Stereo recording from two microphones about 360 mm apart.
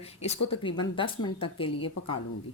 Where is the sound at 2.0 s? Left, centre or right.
Left.